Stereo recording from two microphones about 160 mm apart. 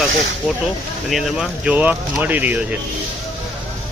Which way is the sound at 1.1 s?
5° right (ahead or behind).